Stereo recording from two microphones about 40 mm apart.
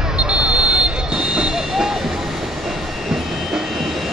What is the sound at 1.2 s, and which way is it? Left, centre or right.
Train, centre.